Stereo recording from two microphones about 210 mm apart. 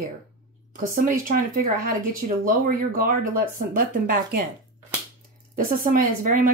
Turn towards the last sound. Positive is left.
turn(degrees=-40)  # may be behind; listen again after turning